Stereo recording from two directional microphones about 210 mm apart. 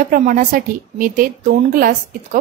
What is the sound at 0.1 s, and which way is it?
A woman's voice, 40° right (ahead or behind).